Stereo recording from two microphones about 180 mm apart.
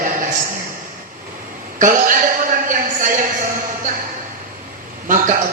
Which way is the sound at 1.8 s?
45° right (ahead or behind).